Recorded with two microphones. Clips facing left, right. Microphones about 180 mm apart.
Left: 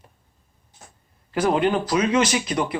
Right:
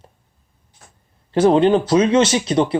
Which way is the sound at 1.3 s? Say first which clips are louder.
Right 7 dB; 30° right (ahead or behind).